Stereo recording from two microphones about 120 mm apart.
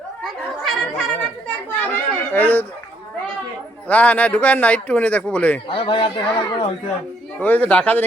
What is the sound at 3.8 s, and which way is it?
Speech, 10° left (ahead or behind).